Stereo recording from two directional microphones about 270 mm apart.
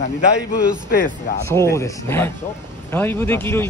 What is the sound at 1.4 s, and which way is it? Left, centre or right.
Speech, centre.